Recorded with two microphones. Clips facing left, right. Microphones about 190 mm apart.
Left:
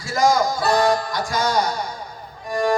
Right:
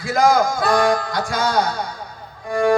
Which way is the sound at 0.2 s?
55° right (ahead or behind).